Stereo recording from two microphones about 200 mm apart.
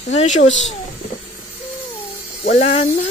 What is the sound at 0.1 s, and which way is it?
Speech, 30° left (ahead or behind).